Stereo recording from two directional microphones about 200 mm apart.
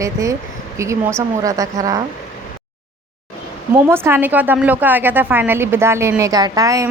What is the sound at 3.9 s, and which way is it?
A woman's voice, 10° right (ahead or behind).